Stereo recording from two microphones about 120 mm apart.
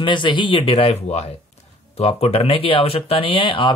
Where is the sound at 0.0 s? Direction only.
40° left (ahead or behind).